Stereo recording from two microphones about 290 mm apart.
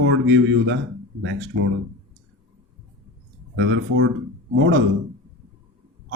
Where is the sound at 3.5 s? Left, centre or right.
Right.